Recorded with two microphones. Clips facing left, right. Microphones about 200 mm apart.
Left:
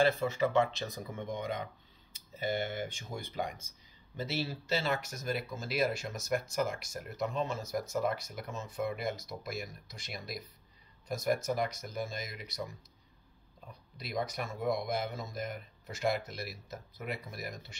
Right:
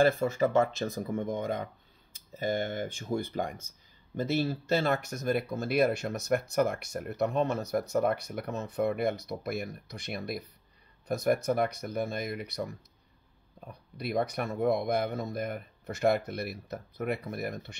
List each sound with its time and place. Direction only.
0.0 s speech: 50° right (ahead or behind)